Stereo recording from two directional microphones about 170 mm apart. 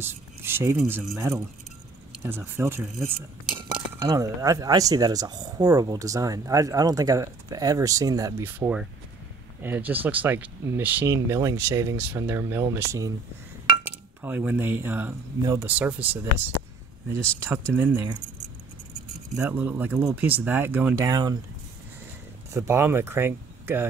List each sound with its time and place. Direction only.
0.0 s speech: 15° right (ahead or behind)
4.0 s speech: 20° right (ahead or behind)
19.3 s speech: 10° right (ahead or behind)
22.5 s speech: 15° right (ahead or behind)